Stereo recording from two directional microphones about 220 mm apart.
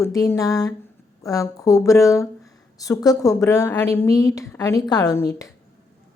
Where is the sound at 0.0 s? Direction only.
15° left (ahead or behind).